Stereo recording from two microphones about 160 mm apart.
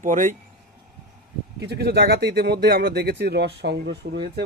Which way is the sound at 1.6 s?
90° right.